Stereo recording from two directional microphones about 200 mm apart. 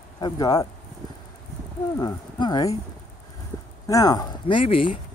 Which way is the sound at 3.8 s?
15° left (ahead or behind).